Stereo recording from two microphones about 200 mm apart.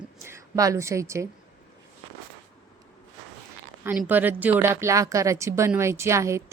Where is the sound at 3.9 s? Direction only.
10° right (ahead or behind).